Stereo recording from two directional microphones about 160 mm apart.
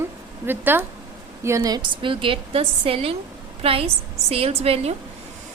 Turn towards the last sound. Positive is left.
turn(degrees=-40)  # may be behind; listen again after turning